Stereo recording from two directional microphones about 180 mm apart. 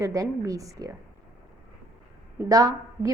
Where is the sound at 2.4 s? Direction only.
20° right (ahead or behind).